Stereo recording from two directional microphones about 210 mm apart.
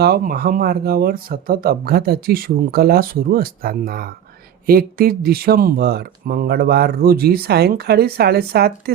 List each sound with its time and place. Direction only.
0.0 s speech: 50° right (ahead or behind)